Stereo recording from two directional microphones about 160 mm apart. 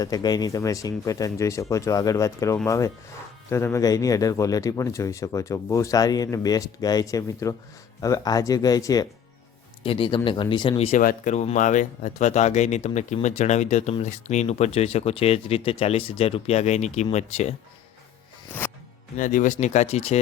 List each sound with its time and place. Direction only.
0.0 s speech: 25° left (ahead or behind)
9.8 s speech: 35° left (ahead or behind)
11.0 s speech: 65° left (ahead or behind)
11.3 s speech: 50° left (ahead or behind)
18.6 s zipper: 10° left (ahead or behind)
19.1 s speech: 55° left (ahead or behind)